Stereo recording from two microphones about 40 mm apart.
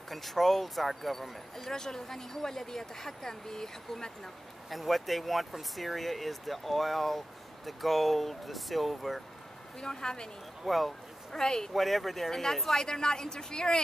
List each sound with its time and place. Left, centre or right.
0.1 s speech: centre
4.6 s speech: centre
9.8 s speech: centre
10.6 s speech: centre
11.3 s speech: centre
11.7 s a woman's voice: centre